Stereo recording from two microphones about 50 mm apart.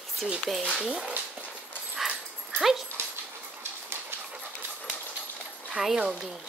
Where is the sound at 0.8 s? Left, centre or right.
Centre.